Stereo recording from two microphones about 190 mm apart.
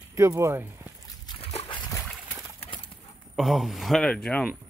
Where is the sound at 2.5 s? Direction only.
30° left (ahead or behind).